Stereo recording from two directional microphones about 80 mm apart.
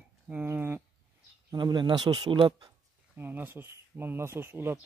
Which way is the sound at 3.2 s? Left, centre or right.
Right.